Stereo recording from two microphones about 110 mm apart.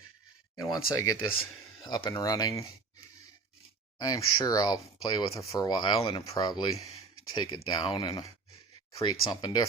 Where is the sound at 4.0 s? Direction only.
35° left (ahead or behind).